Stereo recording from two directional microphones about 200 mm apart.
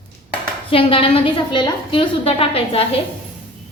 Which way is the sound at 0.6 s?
25° left (ahead or behind).